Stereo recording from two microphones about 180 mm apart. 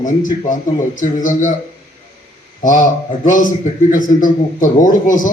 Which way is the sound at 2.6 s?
45° left (ahead or behind).